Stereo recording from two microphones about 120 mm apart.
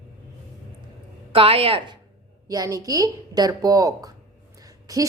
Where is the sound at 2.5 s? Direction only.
30° right (ahead or behind).